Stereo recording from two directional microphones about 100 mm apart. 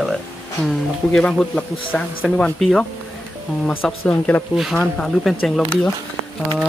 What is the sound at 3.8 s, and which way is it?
Speech, 20° left (ahead or behind).